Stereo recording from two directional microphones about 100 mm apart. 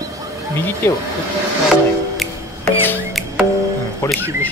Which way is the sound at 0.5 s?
20° left (ahead or behind).